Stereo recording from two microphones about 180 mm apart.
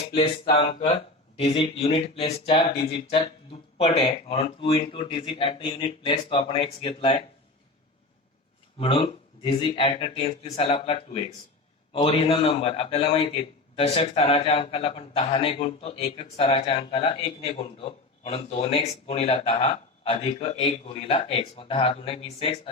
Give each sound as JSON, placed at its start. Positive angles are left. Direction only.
{"t": 0.0, "sound": "a man's voice", "side_deg": 30}
{"t": 8.8, "sound": "a man's voice", "side_deg": 30}